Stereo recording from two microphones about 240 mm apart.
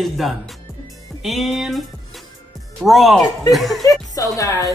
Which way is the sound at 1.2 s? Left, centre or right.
Centre.